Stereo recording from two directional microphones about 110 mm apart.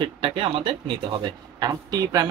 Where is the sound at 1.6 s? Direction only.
35° right (ahead or behind).